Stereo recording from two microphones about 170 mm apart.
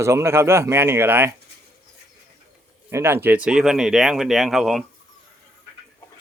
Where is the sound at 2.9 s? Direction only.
15° right (ahead or behind).